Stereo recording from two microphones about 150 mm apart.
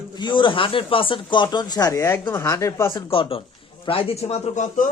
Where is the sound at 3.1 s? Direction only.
40° left (ahead or behind); by 4.9 s 55° left (ahead or behind).